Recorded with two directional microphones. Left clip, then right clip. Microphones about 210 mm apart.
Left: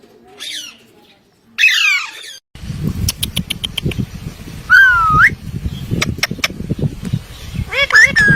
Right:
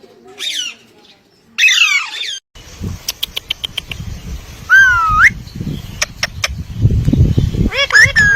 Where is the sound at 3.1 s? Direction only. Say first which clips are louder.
Right 2 dB; centre (ahead or behind).